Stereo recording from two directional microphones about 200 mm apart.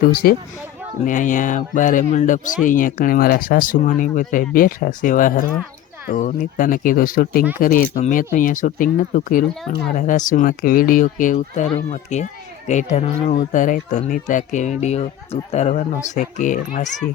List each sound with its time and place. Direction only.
0.1 s speech: 50° left (ahead or behind)